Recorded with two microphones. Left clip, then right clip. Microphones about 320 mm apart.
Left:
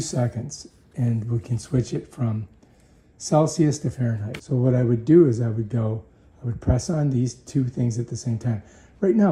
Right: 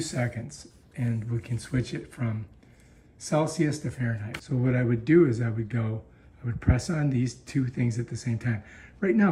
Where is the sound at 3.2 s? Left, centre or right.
Centre.